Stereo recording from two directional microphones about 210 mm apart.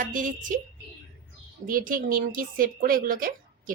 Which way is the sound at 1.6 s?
40° right (ahead or behind).